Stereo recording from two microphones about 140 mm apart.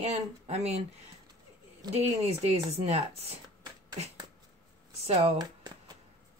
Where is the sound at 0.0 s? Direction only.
50° right (ahead or behind).